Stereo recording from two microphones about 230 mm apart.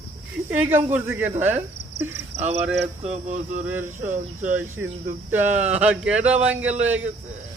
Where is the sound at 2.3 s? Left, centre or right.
Right.